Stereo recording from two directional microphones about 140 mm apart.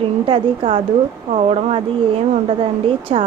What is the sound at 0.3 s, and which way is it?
A woman's voice, 40° right (ahead or behind).